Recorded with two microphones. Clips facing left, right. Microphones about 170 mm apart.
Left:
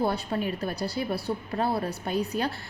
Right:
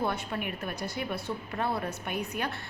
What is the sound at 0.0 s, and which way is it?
Speech, 35° left (ahead or behind).